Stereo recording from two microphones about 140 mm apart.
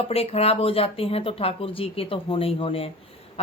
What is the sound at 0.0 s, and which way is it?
Speech, 45° left (ahead or behind).